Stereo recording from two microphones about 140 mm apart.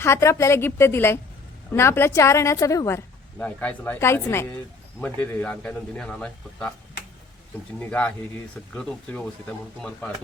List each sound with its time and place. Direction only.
0.0 s a woman's voice: 20° left (ahead or behind)
3.3 s speech: 10° left (ahead or behind)
7.8 s speech: 10° left (ahead or behind)